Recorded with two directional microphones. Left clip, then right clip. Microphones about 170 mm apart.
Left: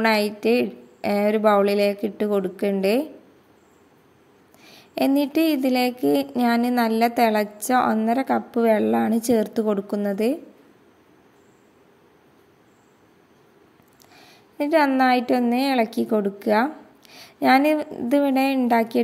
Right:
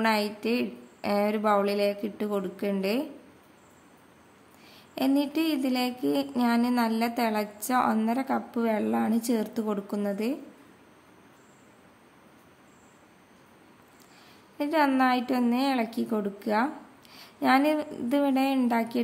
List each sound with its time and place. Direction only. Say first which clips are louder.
0.0 s speech: left 6 dB; 30° left (ahead or behind)
4.6 s speech: left 6 dB; 30° left (ahead or behind)
14.1 s a sound: left 6 dB; 35° left (ahead or behind)
15.0 s speech: left 6 dB; 30° left (ahead or behind)